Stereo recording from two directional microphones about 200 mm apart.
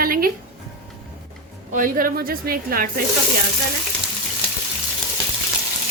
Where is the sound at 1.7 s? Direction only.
45° right (ahead or behind).